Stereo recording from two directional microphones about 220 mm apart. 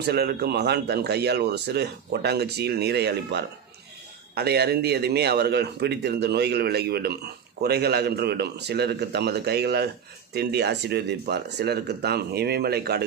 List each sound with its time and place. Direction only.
0.0 s speech: 45° right (ahead or behind)